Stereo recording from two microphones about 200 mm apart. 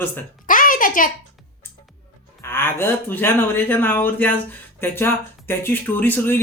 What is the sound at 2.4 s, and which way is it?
Speech, 10° left (ahead or behind).